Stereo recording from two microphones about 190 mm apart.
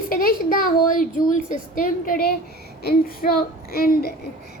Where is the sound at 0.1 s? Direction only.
50° left (ahead or behind).